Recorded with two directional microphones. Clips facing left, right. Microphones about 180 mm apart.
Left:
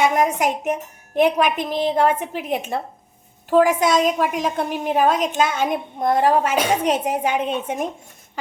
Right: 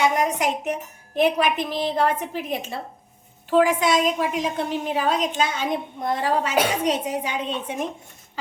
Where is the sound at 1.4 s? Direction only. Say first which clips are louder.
Left 3 dB; 50° left (ahead or behind).